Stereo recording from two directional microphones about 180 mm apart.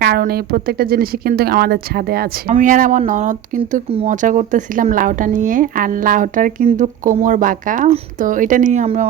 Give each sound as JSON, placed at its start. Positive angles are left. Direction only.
{"t": 0.0, "sound": "speech", "side_deg": -60}